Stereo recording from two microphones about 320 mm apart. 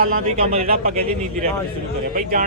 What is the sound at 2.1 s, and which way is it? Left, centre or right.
Speech, right.